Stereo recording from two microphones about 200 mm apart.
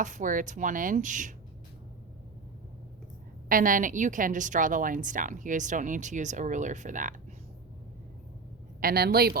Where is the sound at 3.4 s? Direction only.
45° right (ahead or behind).